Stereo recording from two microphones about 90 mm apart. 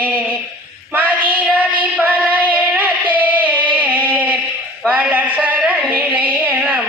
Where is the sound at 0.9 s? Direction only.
20° right (ahead or behind).